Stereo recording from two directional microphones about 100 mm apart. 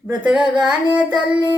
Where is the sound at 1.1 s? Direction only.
50° right (ahead or behind).